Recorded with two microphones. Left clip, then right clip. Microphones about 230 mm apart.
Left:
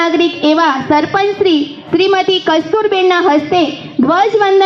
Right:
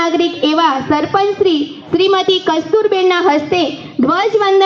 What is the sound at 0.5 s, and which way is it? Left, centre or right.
A woman's voice, left.